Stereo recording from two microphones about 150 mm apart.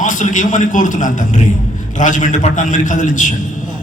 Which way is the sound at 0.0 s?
55° left (ahead or behind).